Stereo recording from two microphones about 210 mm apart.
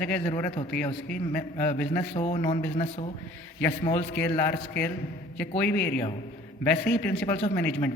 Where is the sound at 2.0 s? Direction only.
30° left (ahead or behind).